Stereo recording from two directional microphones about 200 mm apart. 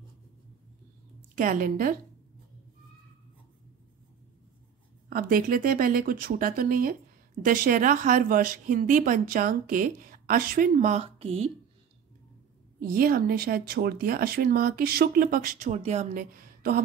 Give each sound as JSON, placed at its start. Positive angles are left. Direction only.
{"t": 1.3, "sound": "speech", "side_deg": -40}
{"t": 5.1, "sound": "speech", "side_deg": -45}
{"t": 12.8, "sound": "speech", "side_deg": -45}